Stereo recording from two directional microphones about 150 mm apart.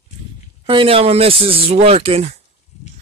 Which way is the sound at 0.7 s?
35° right (ahead or behind).